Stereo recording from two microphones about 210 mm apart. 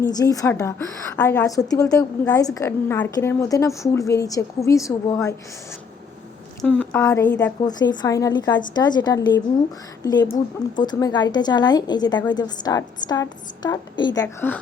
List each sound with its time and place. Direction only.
0.0 s a woman's voice: 20° left (ahead or behind)
6.6 s a woman's voice: 10° left (ahead or behind)